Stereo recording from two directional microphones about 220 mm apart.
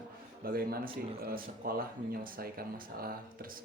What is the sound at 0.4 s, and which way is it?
Speech, 45° right (ahead or behind).